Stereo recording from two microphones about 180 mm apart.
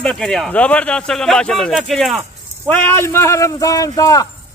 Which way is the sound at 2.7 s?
10° left (ahead or behind).